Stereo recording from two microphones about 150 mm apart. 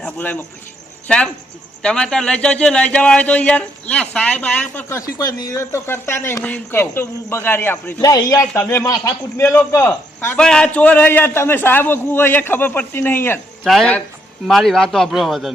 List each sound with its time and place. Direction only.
0.0 s a man's voice: 10° left (ahead or behind)
8.0 s a man's voice: 25° left (ahead or behind)
13.7 s a man's voice: centre (ahead or behind)